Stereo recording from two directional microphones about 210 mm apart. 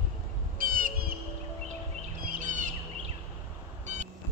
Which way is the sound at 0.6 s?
40° right (ahead or behind).